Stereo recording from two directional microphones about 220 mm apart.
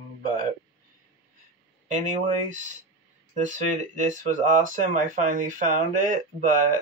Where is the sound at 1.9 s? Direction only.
35° right (ahead or behind).